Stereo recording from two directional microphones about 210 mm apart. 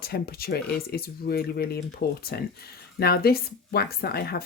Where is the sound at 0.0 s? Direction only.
45° left (ahead or behind).